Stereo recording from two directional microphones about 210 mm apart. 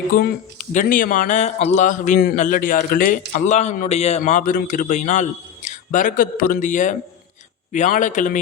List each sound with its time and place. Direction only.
0.1 s speech: 40° left (ahead or behind)